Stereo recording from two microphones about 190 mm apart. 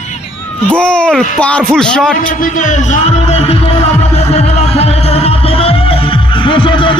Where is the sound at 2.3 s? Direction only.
45° left (ahead or behind).